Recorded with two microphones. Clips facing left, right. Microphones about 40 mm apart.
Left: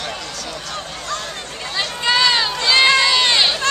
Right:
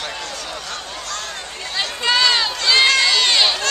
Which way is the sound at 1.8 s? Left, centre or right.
Centre.